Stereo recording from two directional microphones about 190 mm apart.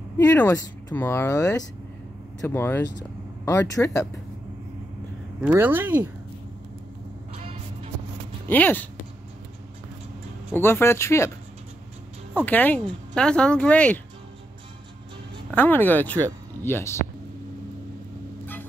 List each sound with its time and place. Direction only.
0.2 s speech: 10° left (ahead or behind)
5.4 s speech: 10° right (ahead or behind)
7.3 s music: 35° right (ahead or behind)
8.5 s speech: 10° left (ahead or behind)
10.5 s speech: 10° left (ahead or behind)
12.4 s speech: 10° left (ahead or behind)
15.5 s speech: 10° left (ahead or behind)
18.4 s vehicle: 10° left (ahead or behind)